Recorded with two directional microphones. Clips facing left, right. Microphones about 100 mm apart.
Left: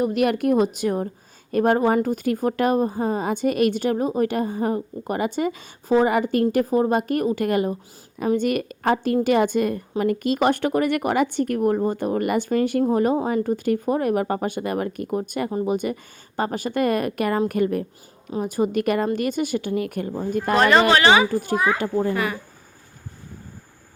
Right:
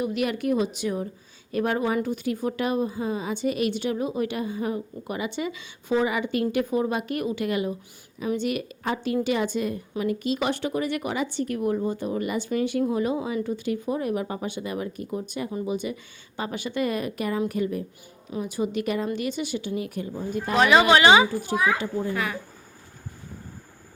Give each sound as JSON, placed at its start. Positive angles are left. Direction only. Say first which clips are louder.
{"t": 0.0, "sound": "a woman's voice", "louder": "left 6 dB", "side_deg": 50}
{"t": 18.3, "sound": "a woman's voice", "louder": "left 5 dB", "side_deg": 45}
{"t": 20.6, "sound": "speech", "louder": "left 1 dB", "side_deg": -5}
{"t": 20.8, "sound": "speech", "louder": "even", "side_deg": -15}
{"t": 21.2, "sound": "a woman's voice", "louder": "left 3 dB", "side_deg": 50}
{"t": 22.1, "sound": "speech", "louder": "left 4 dB", "side_deg": 0}